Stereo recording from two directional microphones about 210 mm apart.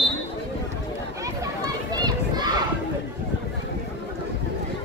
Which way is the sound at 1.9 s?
20° right (ahead or behind).